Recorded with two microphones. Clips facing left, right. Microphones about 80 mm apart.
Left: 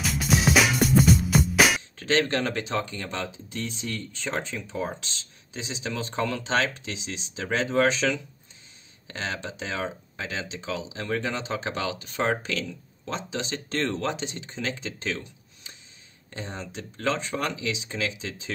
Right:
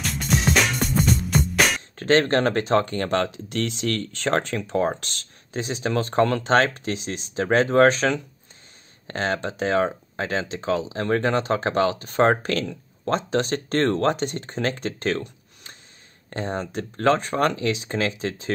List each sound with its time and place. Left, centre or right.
0.0 s music: centre
2.0 s speech: right